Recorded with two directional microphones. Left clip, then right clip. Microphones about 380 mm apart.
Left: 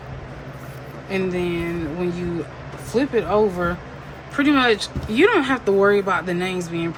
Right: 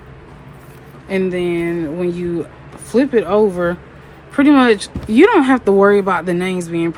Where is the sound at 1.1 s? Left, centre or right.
Centre.